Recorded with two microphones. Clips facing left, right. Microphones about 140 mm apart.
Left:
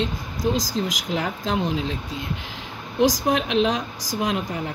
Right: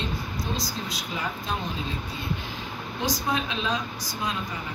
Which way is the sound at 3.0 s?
90° left.